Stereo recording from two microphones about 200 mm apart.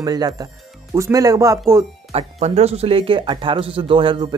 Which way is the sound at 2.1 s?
30° right (ahead or behind).